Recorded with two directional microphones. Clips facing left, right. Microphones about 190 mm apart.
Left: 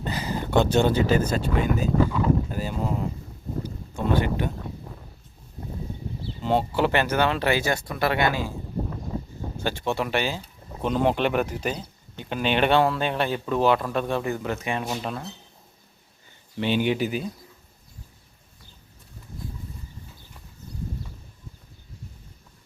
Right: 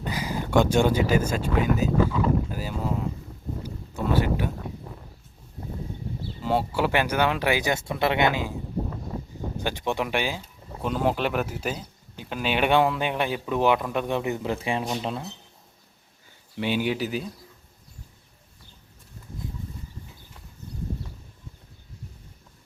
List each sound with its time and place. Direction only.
0.0 s speech: 10° right (ahead or behind)
2.5 s boat: 5° right (ahead or behind)
3.6 s a sound: 5° right (ahead or behind)
6.4 s speech: 5° right (ahead or behind)
9.6 s speech: 15° right (ahead or behind)
14.8 s speech: 15° right (ahead or behind)
16.6 s speech: 10° right (ahead or behind)